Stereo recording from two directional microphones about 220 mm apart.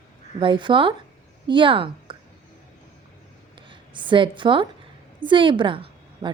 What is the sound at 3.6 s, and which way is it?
A woman's voice, 20° right (ahead or behind).